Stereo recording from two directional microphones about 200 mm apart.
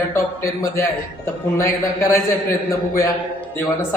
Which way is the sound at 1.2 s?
15° left (ahead or behind).